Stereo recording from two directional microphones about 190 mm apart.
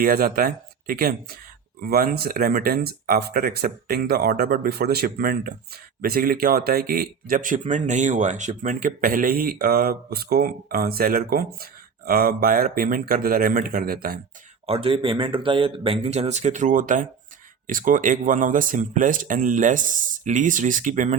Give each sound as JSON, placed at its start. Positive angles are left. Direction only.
{"t": 0.0, "sound": "speech", "side_deg": -50}
{"t": 14.7, "sound": "speech", "side_deg": -30}